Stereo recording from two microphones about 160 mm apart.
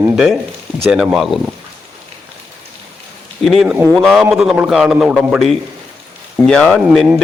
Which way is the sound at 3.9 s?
5° left (ahead or behind).